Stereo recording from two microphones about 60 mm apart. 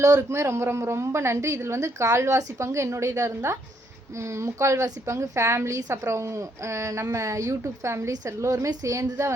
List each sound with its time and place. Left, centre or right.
0.0 s speech: right
0.3 s a woman's voice: right
8.4 s a woman's voice: right